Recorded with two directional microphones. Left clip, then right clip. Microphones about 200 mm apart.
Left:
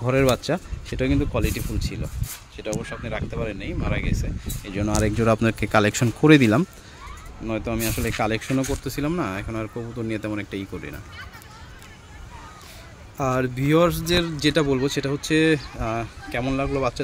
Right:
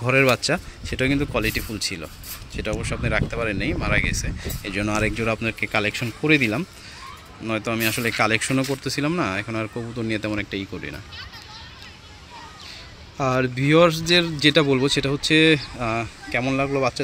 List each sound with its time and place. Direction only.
0.0 s speech: 10° left (ahead or behind)
5.1 s speech: 35° left (ahead or behind)
7.4 s speech: 5° left (ahead or behind)
13.2 s speech: 5° right (ahead or behind)